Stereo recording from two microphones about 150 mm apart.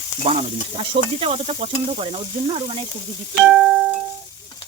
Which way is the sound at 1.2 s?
40° right (ahead or behind).